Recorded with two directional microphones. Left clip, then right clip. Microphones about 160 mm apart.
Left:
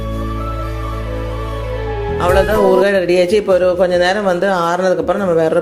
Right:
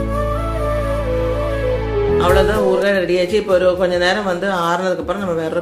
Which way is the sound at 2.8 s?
40° left (ahead or behind).